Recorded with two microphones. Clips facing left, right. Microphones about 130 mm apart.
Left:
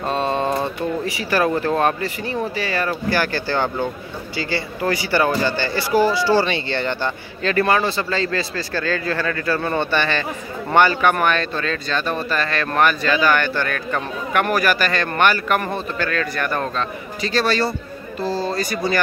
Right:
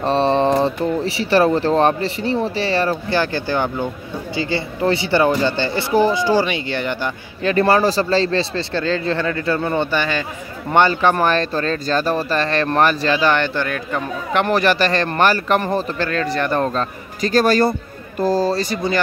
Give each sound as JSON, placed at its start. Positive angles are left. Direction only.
{"t": 0.0, "sound": "a sound", "side_deg": -30}
{"t": 1.0, "sound": "speech", "side_deg": -30}
{"t": 7.6, "sound": "speech", "side_deg": -35}
{"t": 10.7, "sound": "speech", "side_deg": -25}
{"t": 16.7, "sound": "a man's voice", "side_deg": -45}
{"t": 18.6, "sound": "speech", "side_deg": -25}